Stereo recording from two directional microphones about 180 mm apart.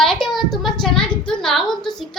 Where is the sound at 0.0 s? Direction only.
Centre (ahead or behind).